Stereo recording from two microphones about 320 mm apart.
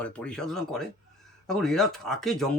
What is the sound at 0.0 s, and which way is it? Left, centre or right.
Speech, centre.